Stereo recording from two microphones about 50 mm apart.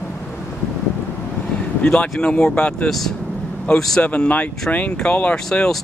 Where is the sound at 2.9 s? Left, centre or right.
Centre.